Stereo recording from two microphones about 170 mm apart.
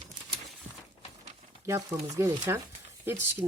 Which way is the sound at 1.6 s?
15° right (ahead or behind).